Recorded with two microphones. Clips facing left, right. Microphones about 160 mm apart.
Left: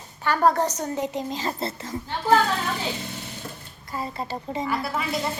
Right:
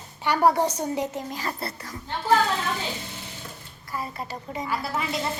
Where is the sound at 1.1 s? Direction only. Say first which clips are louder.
Left 3 dB; 20° left (ahead or behind).